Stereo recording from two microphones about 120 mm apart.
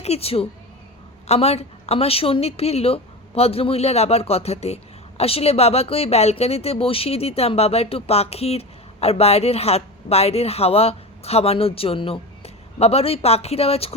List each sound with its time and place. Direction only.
0.0 s a woman's voice: 60° left (ahead or behind)